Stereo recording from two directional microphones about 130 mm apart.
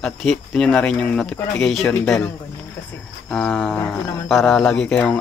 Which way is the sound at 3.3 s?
5° left (ahead or behind).